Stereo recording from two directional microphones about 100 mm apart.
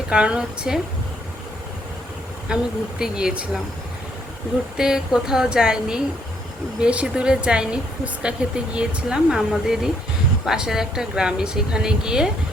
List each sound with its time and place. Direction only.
0.1 s speech: 10° right (ahead or behind)
2.5 s speech: 10° right (ahead or behind)
4.8 s speech: 5° right (ahead or behind)